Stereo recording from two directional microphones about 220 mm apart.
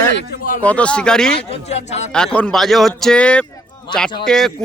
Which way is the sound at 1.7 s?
30° left (ahead or behind).